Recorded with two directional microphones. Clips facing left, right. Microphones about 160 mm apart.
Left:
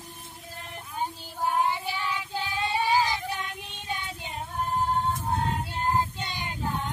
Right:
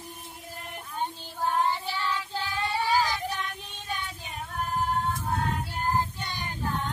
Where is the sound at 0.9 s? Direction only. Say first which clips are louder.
Left 1 dB; 10° left (ahead or behind).